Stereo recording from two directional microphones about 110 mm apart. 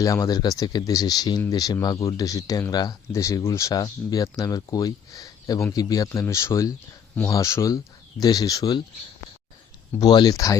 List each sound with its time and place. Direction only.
0.0 s speech: 30° left (ahead or behind)
10.0 s speech: 40° left (ahead or behind)